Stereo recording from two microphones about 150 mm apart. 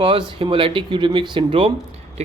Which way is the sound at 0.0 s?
35° right (ahead or behind).